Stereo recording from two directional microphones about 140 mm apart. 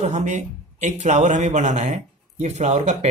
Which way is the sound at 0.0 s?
55° right (ahead or behind).